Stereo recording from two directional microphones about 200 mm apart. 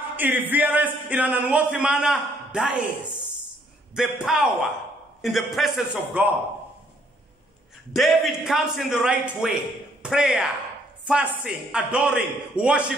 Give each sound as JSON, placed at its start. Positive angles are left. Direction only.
{"t": 0.1, "sound": "speech", "side_deg": -10}
{"t": 3.9, "sound": "a man's voice", "side_deg": -5}
{"t": 7.9, "sound": "a man's voice", "side_deg": 0}